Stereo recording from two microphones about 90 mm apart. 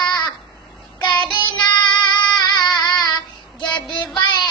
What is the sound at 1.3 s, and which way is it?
Child singing, 55° left (ahead or behind).